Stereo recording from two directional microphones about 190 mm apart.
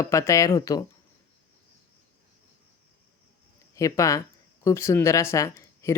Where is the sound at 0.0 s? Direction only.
15° left (ahead or behind).